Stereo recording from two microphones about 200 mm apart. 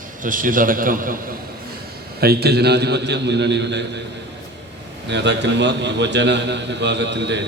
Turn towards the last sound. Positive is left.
turn(degrees=-60)  # may be behind; listen again after turning